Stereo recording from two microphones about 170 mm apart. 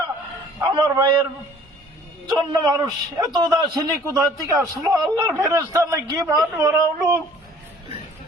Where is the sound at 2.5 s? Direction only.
25° right (ahead or behind).